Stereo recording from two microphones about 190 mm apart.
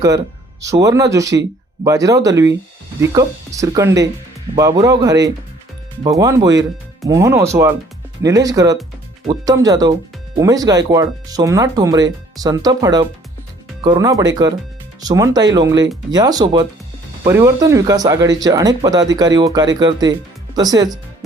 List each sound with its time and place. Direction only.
0.6 s speech: 15° right (ahead or behind)